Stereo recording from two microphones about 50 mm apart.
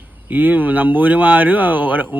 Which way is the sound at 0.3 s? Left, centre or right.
Right.